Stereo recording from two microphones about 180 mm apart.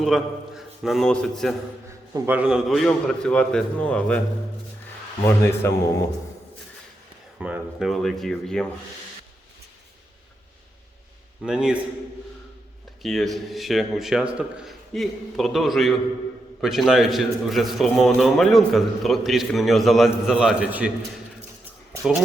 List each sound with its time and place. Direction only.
0.0 s a man's voice: centre (ahead or behind)
2.1 s a man's voice: 10° right (ahead or behind); by 4.2 s 5° left (ahead or behind)
5.2 s a man's voice: 15° left (ahead or behind)
7.3 s a man's voice: 5° right (ahead or behind)
11.4 s a man's voice: 5° right (ahead or behind)
13.0 s a man's voice: centre (ahead or behind)